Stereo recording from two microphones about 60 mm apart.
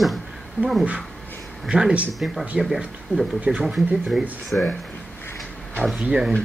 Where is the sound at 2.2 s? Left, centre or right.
Centre.